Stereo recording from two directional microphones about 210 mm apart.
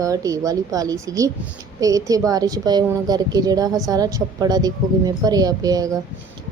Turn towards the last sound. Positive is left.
turn(degrees=-15)  # may be behind; listen again after turning